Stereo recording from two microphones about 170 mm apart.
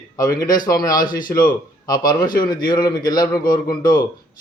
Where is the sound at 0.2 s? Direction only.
20° left (ahead or behind).